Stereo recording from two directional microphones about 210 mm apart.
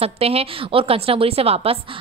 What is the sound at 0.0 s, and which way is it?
A woman's voice, 30° right (ahead or behind).